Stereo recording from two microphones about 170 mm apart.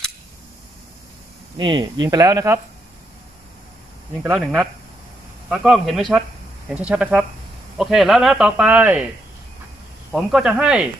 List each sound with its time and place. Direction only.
1.6 s speech: 30° right (ahead or behind)
4.2 s speech: 5° right (ahead or behind)
10.1 s speech: centre (ahead or behind)